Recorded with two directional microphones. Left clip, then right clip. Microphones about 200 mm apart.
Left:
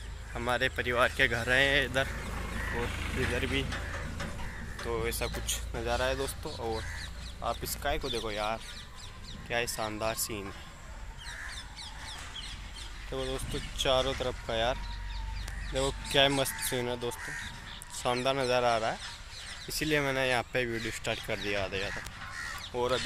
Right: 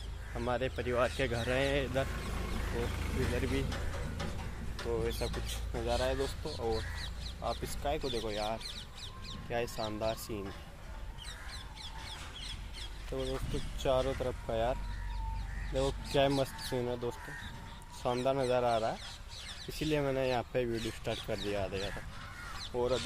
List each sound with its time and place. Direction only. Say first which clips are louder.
0.3 s speech: left 5 dB; centre (ahead or behind)
2.3 s vehicle: left 4 dB; 50° right (ahead or behind)
3.7 s a sound: left 4 dB; 55° right (ahead or behind)
4.8 s speech: left 2 dB; centre (ahead or behind)
13.1 s speech: left 2 dB; centre (ahead or behind)
15.9 s speech: left 5 dB; centre (ahead or behind)